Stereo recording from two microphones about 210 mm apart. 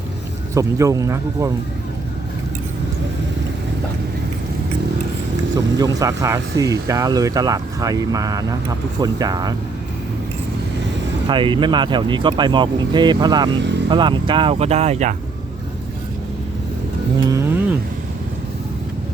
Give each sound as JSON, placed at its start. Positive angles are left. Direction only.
{"t": 0.5, "sound": "speech", "side_deg": -15}
{"t": 5.5, "sound": "speech", "side_deg": -20}
{"t": 11.3, "sound": "speech", "side_deg": -25}
{"t": 17.2, "sound": "a sound", "side_deg": -15}